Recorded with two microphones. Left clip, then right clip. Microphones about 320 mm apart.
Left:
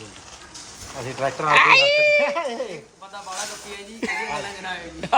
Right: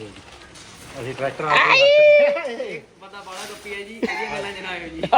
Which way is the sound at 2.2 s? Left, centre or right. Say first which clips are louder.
Right 4 dB; left.